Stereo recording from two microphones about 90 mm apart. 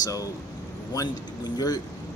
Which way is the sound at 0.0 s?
40° left (ahead or behind).